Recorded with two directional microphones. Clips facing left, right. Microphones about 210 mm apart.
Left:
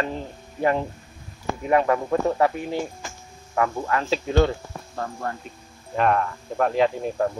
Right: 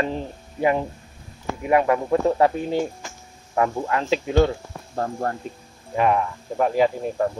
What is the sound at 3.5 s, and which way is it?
Speech, 20° right (ahead or behind).